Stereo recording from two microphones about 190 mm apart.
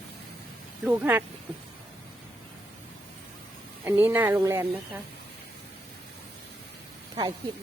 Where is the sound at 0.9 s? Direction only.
10° right (ahead or behind).